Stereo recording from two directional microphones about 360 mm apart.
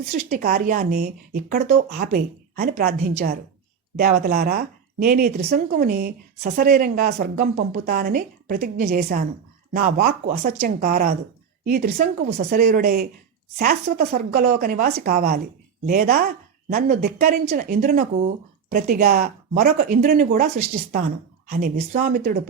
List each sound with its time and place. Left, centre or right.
0.1 s a woman's voice: right